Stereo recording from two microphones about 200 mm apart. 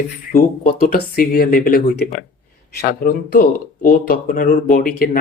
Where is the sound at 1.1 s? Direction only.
45° left (ahead or behind).